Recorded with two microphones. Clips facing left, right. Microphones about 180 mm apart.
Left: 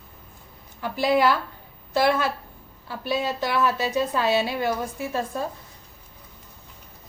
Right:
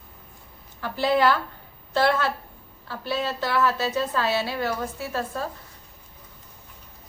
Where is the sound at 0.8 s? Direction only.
15° left (ahead or behind).